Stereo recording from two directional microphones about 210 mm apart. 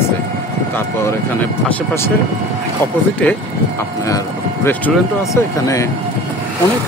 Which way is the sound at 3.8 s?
15° left (ahead or behind).